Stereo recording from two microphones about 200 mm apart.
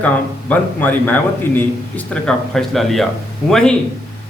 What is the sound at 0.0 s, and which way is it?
A man's voice, 5° left (ahead or behind).